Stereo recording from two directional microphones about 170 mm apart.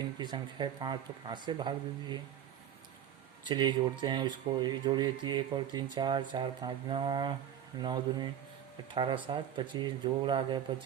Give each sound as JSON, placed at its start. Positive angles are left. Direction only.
{"t": 0.2, "sound": "speech", "side_deg": -25}
{"t": 3.4, "sound": "speech", "side_deg": -25}